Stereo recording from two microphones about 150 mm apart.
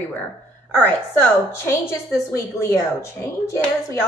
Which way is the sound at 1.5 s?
15° left (ahead or behind).